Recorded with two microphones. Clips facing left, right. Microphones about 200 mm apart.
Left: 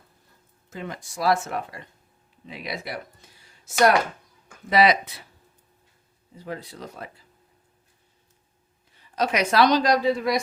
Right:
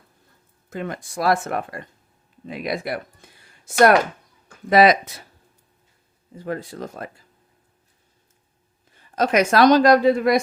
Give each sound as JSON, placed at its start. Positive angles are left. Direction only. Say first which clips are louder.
{"t": 0.7, "sound": "speech", "louder": "right 5 dB", "side_deg": -55}
{"t": 6.3, "sound": "speech", "louder": "right 6 dB", "side_deg": -50}
{"t": 9.0, "sound": "speech", "louder": "right 5 dB", "side_deg": -50}